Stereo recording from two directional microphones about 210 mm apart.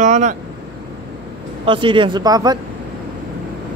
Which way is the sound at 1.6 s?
25° right (ahead or behind).